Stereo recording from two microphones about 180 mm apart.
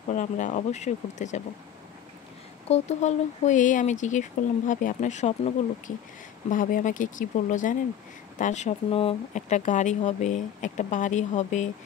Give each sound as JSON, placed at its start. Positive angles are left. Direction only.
{"t": 0.1, "sound": "speech", "side_deg": 45}
{"t": 2.7, "sound": "speech", "side_deg": 40}